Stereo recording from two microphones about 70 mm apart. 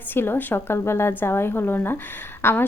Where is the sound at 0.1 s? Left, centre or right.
Left.